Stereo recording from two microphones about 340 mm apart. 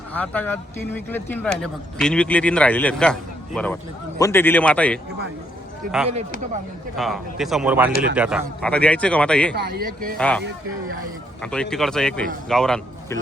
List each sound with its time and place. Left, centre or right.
0.1 s speech: centre
5.8 s speech: right
6.9 s speech: centre
9.6 s speech: right
10.2 s speech: centre
11.5 s speech: centre